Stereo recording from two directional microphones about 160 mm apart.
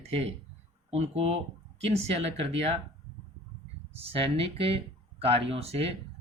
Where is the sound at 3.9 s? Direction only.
40° right (ahead or behind).